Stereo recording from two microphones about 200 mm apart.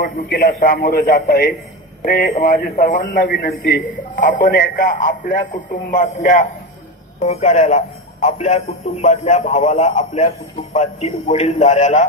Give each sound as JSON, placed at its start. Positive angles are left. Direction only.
{"t": 0.0, "sound": "a man's voice", "side_deg": 45}